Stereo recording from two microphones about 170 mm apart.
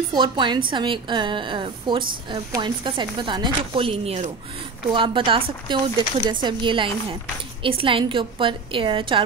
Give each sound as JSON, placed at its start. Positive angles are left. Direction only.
{"t": 0.1, "sound": "a woman's voice", "side_deg": -25}